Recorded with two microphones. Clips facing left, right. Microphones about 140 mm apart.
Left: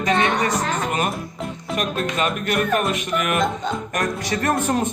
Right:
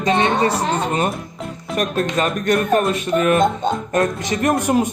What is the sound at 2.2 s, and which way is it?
Speech, 35° right (ahead or behind).